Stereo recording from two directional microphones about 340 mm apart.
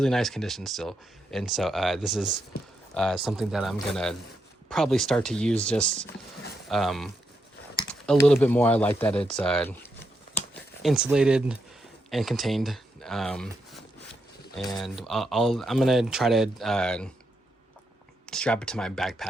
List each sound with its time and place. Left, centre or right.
0.0 s speech: centre
10.3 s a sound: centre
12.1 s speech: centre
18.3 s speech: centre